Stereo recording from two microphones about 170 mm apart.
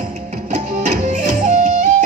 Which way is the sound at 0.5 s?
50° right (ahead or behind).